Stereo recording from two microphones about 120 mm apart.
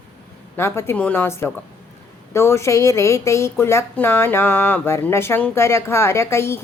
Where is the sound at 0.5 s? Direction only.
20° left (ahead or behind).